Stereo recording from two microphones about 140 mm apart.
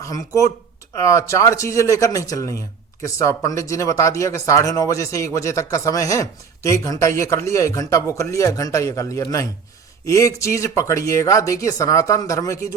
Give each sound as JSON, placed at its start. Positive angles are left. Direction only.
{"t": 0.9, "sound": "a man's voice", "side_deg": 20}